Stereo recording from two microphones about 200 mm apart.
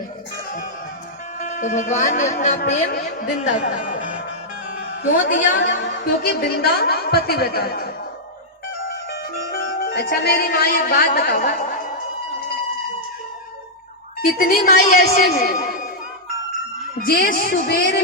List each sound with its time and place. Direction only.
1.4 s a man's voice: 40° left (ahead or behind)
5.3 s a man's voice: 40° left (ahead or behind)
5.7 s speech: 55° left (ahead or behind)
9.8 s speech: 50° left (ahead or behind)
14.2 s speech: 45° left (ahead or behind)
17.1 s speech: 45° left (ahead or behind)